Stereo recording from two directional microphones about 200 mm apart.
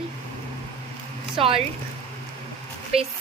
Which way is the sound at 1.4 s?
25° right (ahead or behind).